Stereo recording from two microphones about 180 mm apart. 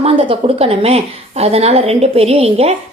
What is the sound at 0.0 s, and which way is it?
A woman's voice, 30° right (ahead or behind).